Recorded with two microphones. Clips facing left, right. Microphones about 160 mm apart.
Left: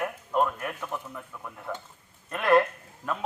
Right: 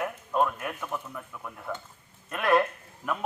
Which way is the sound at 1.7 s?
5° right (ahead or behind).